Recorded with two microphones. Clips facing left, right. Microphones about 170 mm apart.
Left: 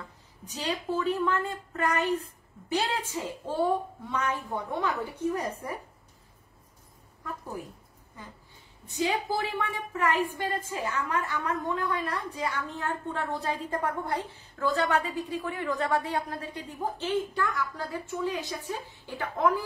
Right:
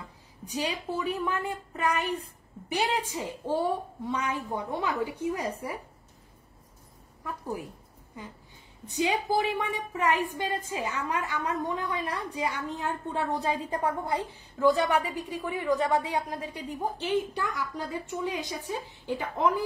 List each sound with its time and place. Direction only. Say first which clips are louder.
0.5 s a woman's voice: even; 10° right (ahead or behind)
8.8 s a woman's voice: right 1 dB; 15° right (ahead or behind)